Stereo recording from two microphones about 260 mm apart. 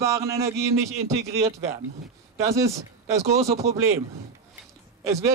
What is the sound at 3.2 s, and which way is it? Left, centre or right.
Speech, right.